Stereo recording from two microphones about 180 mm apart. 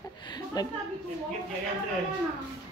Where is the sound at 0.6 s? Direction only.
20° left (ahead or behind).